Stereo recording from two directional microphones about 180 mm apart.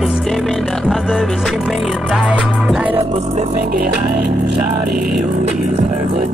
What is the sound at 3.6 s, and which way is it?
Music, 55° right (ahead or behind).